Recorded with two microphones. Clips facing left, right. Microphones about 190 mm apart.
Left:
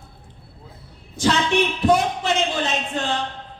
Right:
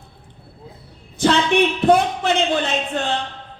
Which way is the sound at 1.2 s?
60° right (ahead or behind).